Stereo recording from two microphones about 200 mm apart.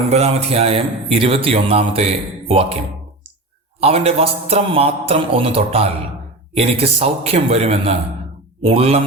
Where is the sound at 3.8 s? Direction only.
30° right (ahead or behind).